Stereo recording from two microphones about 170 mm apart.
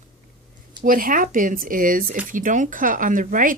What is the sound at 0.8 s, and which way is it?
A woman's voice, 55° right (ahead or behind).